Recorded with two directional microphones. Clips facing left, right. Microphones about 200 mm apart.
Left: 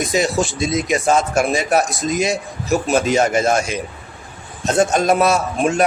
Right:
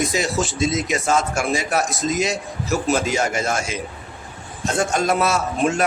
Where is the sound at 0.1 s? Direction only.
15° left (ahead or behind).